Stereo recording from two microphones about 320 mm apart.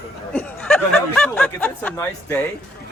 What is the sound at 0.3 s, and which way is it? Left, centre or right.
Speech, centre.